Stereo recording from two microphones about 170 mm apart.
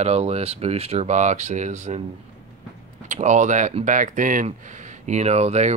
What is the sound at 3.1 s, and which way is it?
Speech, 45° right (ahead or behind).